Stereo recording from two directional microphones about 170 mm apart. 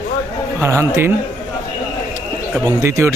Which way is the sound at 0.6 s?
15° right (ahead or behind).